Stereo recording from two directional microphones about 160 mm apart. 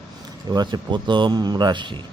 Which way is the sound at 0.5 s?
25° right (ahead or behind).